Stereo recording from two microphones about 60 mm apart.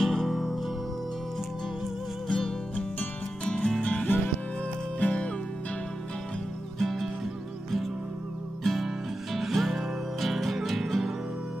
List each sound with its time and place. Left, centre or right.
0.0 s music: centre
2.2 s music: centre
2.7 s music: left
6.8 s music: centre
8.6 s music: centre